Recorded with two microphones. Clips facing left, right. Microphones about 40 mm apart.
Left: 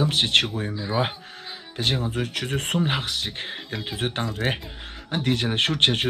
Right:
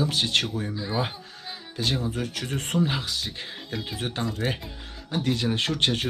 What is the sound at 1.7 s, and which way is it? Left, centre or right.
Speech, left.